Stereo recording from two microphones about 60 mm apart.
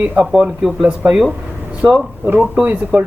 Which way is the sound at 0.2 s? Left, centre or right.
Centre.